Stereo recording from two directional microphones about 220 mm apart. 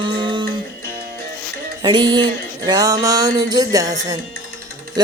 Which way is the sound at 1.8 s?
20° right (ahead or behind).